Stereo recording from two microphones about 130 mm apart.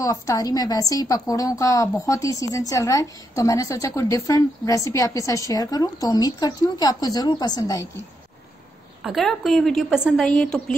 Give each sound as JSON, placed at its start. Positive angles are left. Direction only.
{"t": 0.0, "sound": "a woman's voice", "side_deg": 25}
{"t": 9.0, "sound": "a woman's voice", "side_deg": 0}